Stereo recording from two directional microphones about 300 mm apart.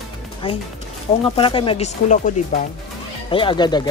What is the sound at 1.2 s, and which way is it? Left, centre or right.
Speech, centre.